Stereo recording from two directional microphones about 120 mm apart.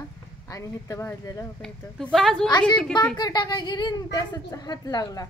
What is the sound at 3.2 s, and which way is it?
Speech, 35° left (ahead or behind).